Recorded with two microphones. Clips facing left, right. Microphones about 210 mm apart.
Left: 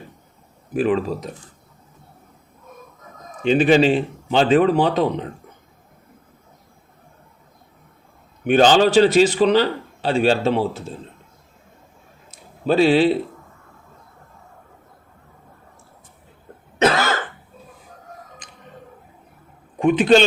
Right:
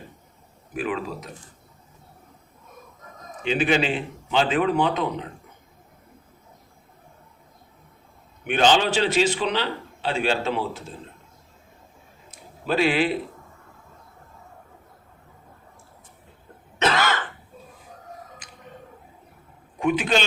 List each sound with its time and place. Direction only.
0.7 s a man's voice: 35° left (ahead or behind)
3.4 s a man's voice: 35° left (ahead or behind)
8.4 s a man's voice: 40° left (ahead or behind)
12.6 s a man's voice: 30° left (ahead or behind)
16.8 s cough: 45° left (ahead or behind)